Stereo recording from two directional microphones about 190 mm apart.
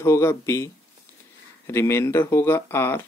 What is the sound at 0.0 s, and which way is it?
Speech, 15° left (ahead or behind).